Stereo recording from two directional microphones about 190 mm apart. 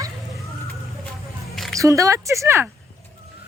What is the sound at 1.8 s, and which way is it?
Speech, 15° right (ahead or behind).